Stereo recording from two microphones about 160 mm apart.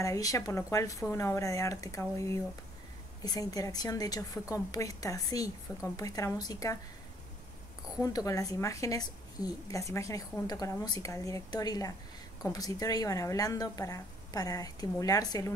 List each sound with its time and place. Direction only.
0.0 s a woman's voice: 20° left (ahead or behind)
8.0 s a woman's voice: 20° left (ahead or behind)